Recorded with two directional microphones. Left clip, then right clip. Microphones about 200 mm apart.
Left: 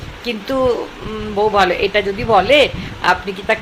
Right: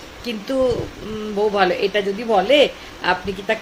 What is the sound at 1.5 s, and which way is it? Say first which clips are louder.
A woman's voice: left 4 dB; 15° right (ahead or behind).